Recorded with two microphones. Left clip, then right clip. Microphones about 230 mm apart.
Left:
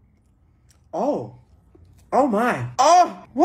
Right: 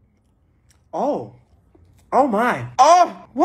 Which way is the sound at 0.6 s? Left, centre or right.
Centre.